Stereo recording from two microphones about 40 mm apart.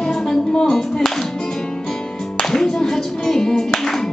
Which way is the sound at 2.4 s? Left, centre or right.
Centre.